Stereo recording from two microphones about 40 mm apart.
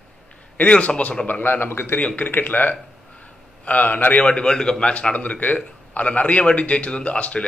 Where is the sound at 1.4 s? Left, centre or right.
Left.